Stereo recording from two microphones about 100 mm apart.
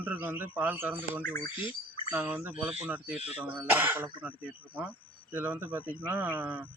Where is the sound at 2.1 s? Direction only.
15° right (ahead or behind).